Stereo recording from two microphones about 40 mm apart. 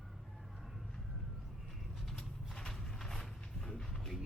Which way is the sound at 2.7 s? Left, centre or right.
Centre.